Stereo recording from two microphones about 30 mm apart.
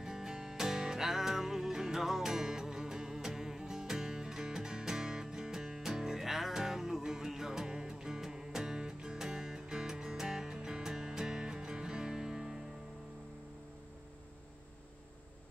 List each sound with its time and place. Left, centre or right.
0.0 s music: centre
8.7 s music: right
9.2 s music: centre